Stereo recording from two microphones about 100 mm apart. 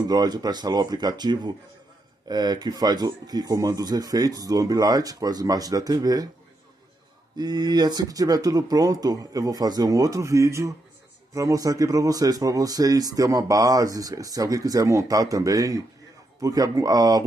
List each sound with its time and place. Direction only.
0.1 s speech: 40° right (ahead or behind)
7.3 s speech: 45° right (ahead or behind)